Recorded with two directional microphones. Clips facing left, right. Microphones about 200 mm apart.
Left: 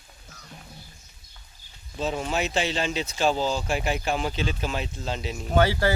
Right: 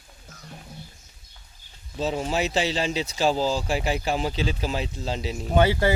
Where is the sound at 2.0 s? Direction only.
35° right (ahead or behind).